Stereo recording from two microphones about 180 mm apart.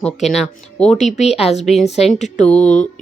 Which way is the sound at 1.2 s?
35° left (ahead or behind).